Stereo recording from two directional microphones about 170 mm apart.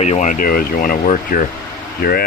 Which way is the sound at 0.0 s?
45° left (ahead or behind).